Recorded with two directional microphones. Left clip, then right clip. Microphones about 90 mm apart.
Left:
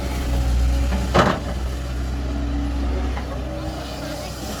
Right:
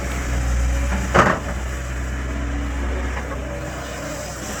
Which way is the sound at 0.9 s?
Centre (ahead or behind).